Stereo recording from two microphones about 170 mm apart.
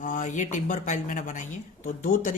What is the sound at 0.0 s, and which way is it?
A woman's voice, 50° left (ahead or behind).